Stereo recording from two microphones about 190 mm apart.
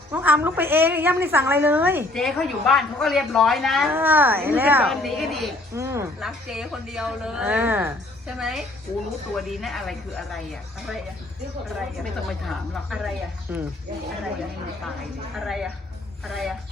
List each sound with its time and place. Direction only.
0.1 s a woman's voice: 10° right (ahead or behind)
2.1 s a woman's voice: centre (ahead or behind)
3.9 s a woman's voice: 10° right (ahead or behind)
4.9 s a woman's voice: centre (ahead or behind)
5.7 s a woman's voice: 15° right (ahead or behind)
6.1 s a woman's voice: centre (ahead or behind)
12.5 s a woman's voice: centre (ahead or behind)
15.4 s a woman's voice: centre (ahead or behind)